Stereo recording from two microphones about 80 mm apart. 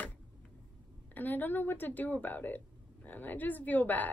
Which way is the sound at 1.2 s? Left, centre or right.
Left.